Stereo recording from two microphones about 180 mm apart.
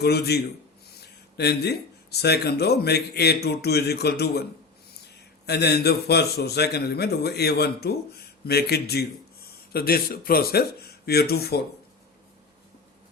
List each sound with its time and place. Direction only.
0.0 s a man's voice: 65° left (ahead or behind)
5.5 s a man's voice: 65° left (ahead or behind)